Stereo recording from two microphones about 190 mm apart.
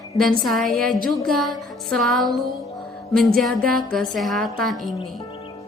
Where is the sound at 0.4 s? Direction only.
Centre (ahead or behind).